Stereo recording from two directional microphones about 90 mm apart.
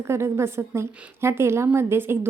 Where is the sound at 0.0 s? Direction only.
30° right (ahead or behind).